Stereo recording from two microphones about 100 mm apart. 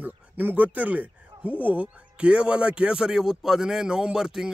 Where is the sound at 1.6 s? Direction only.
15° right (ahead or behind).